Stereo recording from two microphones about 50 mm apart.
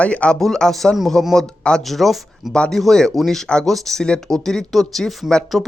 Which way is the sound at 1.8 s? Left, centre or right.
Centre.